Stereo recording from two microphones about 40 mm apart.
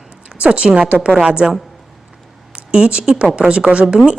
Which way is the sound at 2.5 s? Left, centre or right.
Right.